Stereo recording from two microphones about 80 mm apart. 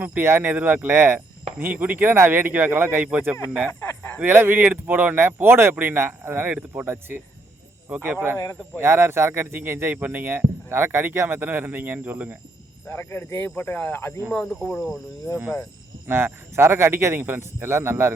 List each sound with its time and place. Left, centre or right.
0.0 s speech: right
3.8 s a sound: left
4.2 s speech: right
12.9 s speech: left
14.8 s speech: centre
16.0 s speech: right